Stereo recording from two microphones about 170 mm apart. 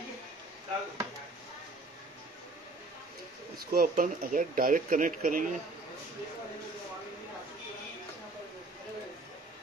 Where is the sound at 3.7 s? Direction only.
60° right (ahead or behind).